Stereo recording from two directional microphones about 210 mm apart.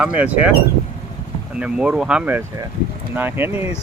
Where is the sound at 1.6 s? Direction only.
5° right (ahead or behind).